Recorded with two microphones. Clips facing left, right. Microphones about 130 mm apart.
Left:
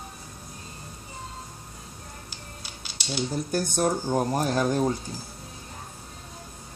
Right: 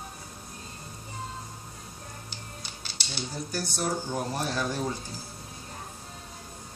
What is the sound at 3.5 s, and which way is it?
Speech, 50° left (ahead or behind).